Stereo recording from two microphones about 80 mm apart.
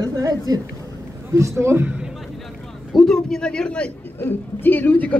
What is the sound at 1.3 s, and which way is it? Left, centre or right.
Speech, right.